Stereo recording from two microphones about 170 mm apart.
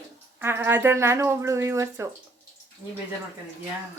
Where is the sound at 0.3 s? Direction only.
15° right (ahead or behind).